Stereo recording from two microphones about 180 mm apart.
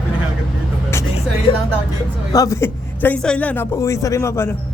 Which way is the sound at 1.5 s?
30° left (ahead or behind).